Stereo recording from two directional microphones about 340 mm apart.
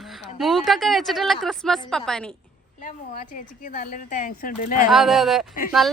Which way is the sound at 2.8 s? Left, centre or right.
Left.